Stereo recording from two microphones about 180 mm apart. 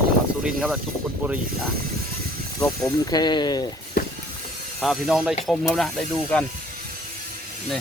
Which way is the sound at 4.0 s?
55° left (ahead or behind).